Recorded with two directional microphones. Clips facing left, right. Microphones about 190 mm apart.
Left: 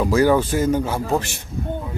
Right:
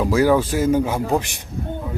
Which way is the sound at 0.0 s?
5° right (ahead or behind).